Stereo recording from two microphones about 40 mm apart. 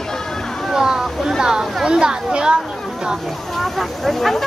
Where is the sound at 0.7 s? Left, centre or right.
Centre.